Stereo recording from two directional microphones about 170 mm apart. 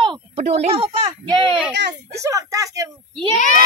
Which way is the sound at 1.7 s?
85° right.